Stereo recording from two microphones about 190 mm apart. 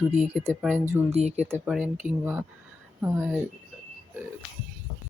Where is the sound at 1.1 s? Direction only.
35° right (ahead or behind).